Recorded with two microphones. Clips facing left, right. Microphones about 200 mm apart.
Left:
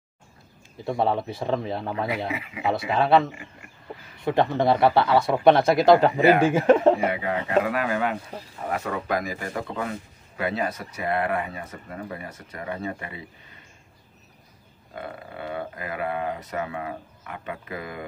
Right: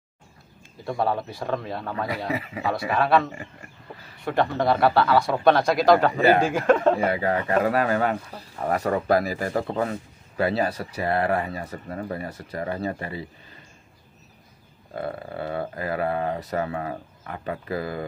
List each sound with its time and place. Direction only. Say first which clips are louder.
0.8 s speech: left 1 dB; 20° left (ahead or behind)
2.2 s speech: right 3 dB; 40° right (ahead or behind)
2.6 s speech: left 2 dB; 20° left (ahead or behind)
7.1 s speech: right 3 dB; 40° right (ahead or behind)
15.0 s speech: right 5 dB; 35° right (ahead or behind)